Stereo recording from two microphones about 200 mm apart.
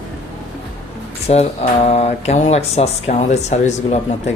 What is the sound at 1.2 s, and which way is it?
Speech, 30° left (ahead or behind).